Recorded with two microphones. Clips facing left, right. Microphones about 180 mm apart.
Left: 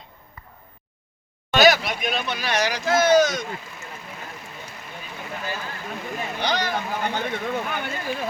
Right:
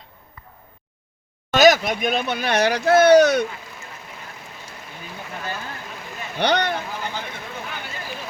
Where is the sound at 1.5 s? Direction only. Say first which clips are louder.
Right 3 dB; 45° right (ahead or behind); by 3.4 s 65° right (ahead or behind).